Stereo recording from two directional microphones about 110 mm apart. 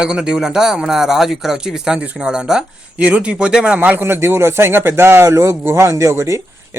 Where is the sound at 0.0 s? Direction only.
5° right (ahead or behind).